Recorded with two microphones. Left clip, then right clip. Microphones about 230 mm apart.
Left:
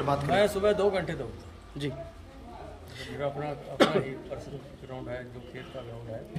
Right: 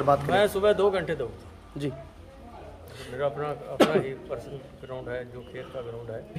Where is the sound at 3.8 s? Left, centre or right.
Right.